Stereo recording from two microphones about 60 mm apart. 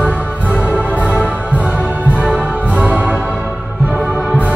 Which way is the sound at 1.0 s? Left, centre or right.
Left.